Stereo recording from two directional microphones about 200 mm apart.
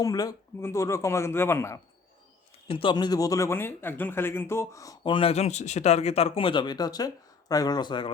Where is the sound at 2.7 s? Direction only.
25° left (ahead or behind).